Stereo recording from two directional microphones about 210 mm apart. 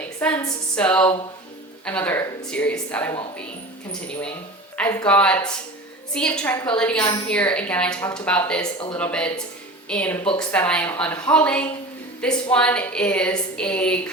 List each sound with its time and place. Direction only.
0.2 s speech: 5° left (ahead or behind)
4.8 s speech: 15° left (ahead or behind)
5.0 s a woman's voice: 5° left (ahead or behind)